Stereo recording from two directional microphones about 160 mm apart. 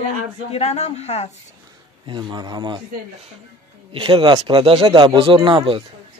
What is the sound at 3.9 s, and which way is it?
Speech, 30° right (ahead or behind).